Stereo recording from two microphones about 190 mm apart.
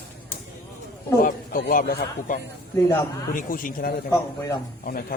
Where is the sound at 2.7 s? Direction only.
15° left (ahead or behind).